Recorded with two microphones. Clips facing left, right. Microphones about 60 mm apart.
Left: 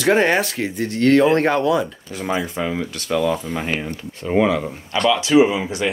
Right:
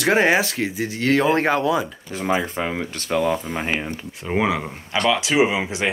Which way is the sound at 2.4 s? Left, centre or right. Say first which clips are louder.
Left 1 dB; right.